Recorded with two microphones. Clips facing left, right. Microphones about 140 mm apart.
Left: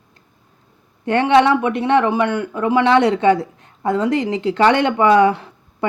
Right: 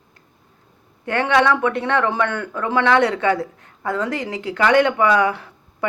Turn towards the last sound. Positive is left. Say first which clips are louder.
# left 4 dB
turn(degrees=25)  # may be behind; listen again after turning